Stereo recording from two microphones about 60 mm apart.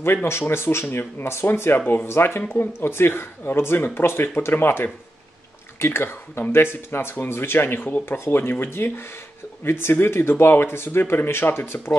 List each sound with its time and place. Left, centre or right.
0.0 s speech: left
8.2 s speech: left